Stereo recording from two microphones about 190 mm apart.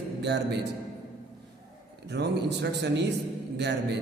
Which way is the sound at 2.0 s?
65° right (ahead or behind).